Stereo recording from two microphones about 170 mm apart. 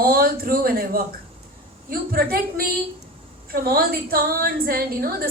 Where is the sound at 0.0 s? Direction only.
60° right (ahead or behind).